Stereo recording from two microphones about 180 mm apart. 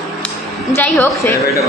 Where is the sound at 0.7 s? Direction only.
15° left (ahead or behind).